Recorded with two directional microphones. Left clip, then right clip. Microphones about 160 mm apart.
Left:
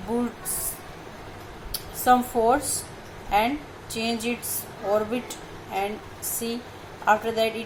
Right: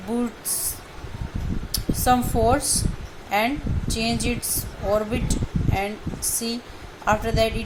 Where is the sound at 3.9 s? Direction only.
20° right (ahead or behind).